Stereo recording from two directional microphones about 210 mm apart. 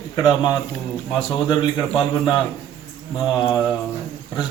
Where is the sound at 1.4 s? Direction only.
20° left (ahead or behind).